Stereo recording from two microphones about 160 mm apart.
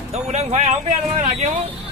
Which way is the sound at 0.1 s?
45° right (ahead or behind).